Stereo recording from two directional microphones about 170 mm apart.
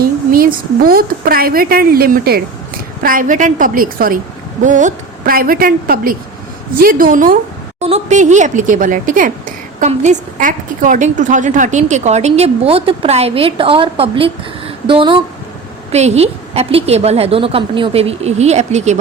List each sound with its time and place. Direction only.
0.0 s speech: 60° right (ahead or behind)
7.8 s a woman's voice: 40° right (ahead or behind)